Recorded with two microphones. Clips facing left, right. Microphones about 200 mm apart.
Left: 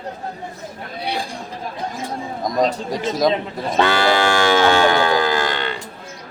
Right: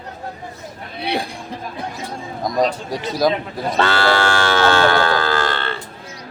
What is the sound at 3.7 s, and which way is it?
Livestock, 15° left (ahead or behind).